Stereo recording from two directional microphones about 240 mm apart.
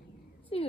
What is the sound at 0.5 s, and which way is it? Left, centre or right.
Speech, left.